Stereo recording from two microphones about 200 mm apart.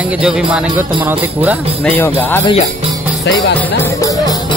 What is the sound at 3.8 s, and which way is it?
Music, 15° left (ahead or behind).